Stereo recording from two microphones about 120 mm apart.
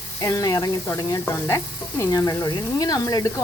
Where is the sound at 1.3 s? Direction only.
25° left (ahead or behind).